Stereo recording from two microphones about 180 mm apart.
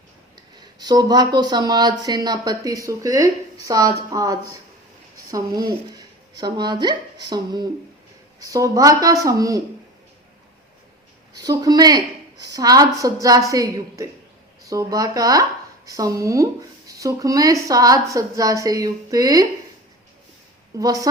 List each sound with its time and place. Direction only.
0.5 s speech: 25° right (ahead or behind)
11.4 s speech: 20° right (ahead or behind)
20.7 s speech: 20° right (ahead or behind)